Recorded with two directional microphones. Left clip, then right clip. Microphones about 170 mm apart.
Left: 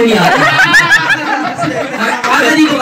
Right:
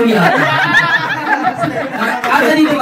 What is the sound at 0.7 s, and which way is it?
Snicker, 25° left (ahead or behind).